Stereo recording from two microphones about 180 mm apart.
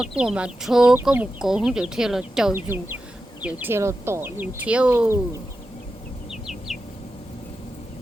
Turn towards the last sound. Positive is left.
turn(degrees=0)  # may be behind; listen again after turning